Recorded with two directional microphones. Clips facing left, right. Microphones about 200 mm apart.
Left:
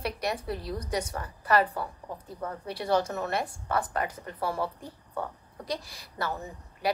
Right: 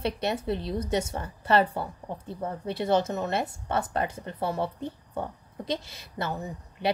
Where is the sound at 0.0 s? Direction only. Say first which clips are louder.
Right 3 dB; 25° right (ahead or behind).